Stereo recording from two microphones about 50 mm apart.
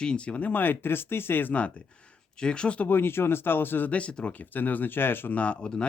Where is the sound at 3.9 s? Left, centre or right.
Left.